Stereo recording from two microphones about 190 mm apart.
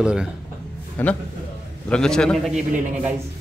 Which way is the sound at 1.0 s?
10° left (ahead or behind).